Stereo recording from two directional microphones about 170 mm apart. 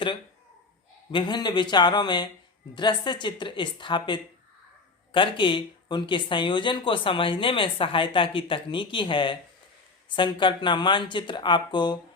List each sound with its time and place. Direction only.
1.1 s speech: 25° left (ahead or behind)